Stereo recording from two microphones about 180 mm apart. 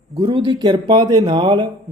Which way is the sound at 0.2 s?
25° right (ahead or behind).